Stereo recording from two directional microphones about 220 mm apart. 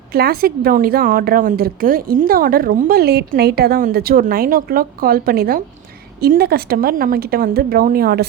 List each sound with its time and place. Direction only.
0.1 s a woman's voice: 45° right (ahead or behind)